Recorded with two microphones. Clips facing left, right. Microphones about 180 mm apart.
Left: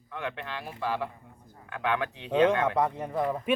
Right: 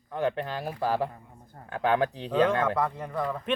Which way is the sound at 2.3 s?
20° left (ahead or behind).